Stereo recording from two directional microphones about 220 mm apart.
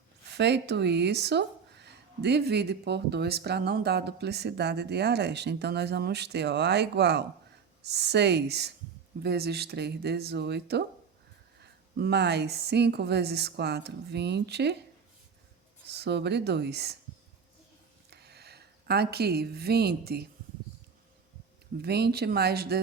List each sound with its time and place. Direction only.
0.3 s speech: 50° right (ahead or behind)
15.9 s speech: 50° right (ahead or behind)
18.1 s speech: 50° right (ahead or behind)
21.8 s speech: 45° right (ahead or behind)